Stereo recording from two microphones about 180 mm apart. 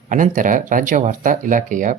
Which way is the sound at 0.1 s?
45° right (ahead or behind).